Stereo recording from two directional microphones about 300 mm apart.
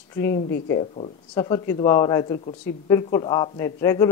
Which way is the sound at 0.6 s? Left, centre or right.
Centre.